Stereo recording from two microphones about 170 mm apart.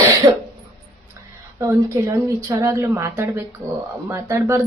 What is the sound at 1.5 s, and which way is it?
A woman's voice, 15° right (ahead or behind).